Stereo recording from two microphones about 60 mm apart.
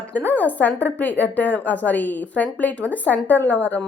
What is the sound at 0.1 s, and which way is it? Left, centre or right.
A woman's voice, left.